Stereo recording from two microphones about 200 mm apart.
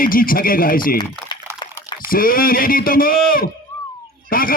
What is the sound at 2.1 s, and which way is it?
A man's voice, 45° left (ahead or behind).